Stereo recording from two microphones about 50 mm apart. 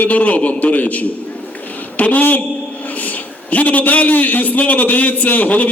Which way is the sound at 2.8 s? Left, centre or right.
Left.